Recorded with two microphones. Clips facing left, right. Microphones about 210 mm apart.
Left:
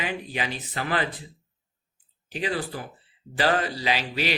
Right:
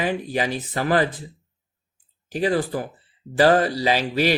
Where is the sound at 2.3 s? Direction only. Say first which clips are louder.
Right 7 dB; 45° right (ahead or behind).